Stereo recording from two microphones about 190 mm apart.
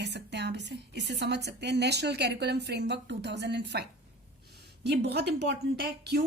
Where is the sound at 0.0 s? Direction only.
65° right (ahead or behind).